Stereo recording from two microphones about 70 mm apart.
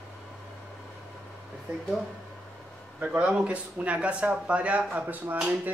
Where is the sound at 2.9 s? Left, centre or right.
Centre.